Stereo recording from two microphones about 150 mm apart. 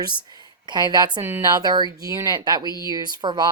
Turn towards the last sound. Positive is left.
turn(degrees=-30)  # may be behind; listen again after turning